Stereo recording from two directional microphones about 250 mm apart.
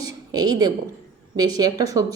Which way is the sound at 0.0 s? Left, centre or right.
Centre.